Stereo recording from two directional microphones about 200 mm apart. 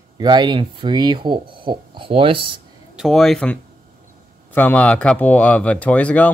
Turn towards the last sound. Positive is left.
turn(degrees=5)  # may be behind; listen again after turning